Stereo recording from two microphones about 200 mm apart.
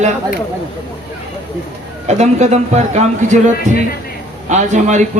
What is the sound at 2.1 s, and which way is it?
A man's voice, 35° right (ahead or behind).